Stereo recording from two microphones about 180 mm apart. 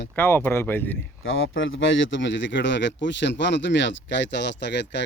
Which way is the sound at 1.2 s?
90° left.